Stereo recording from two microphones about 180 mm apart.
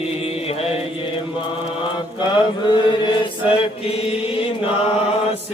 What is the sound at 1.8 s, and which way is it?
Chant, 25° left (ahead or behind).